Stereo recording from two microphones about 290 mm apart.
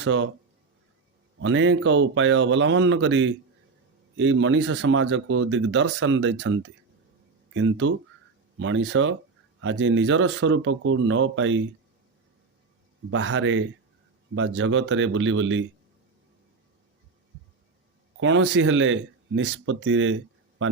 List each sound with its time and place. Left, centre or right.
0.0 s speech: right
1.4 s speech: right
13.1 s speech: right
18.2 s speech: right